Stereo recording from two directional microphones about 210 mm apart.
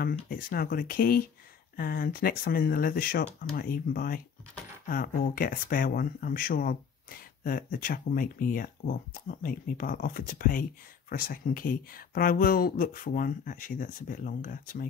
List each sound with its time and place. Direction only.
0.1 s speech: 45° left (ahead or behind)